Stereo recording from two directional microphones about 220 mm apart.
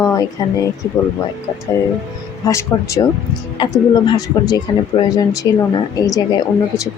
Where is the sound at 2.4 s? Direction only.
15° left (ahead or behind).